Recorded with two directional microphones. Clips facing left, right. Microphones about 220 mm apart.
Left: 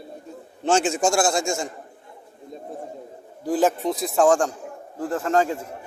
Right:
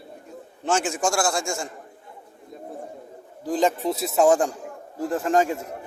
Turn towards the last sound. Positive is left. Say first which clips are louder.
# even
turn(degrees=-15)  # may be behind; listen again after turning